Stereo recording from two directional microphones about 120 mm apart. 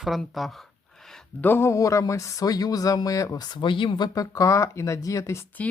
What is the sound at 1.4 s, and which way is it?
Speech, 20° left (ahead or behind).